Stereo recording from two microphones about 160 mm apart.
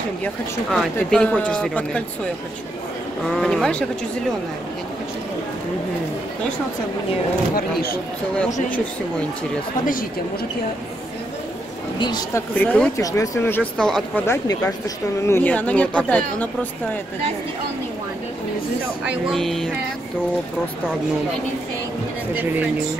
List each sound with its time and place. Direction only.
0.2 s speech: centre (ahead or behind)
3.3 s speech: centre (ahead or behind)
12.4 s speech: 10° left (ahead or behind)
12.9 s speech: 20° left (ahead or behind)
13.6 s speech: 5° left (ahead or behind)
14.2 s speech: 15° left (ahead or behind)
19.0 s speech: centre (ahead or behind)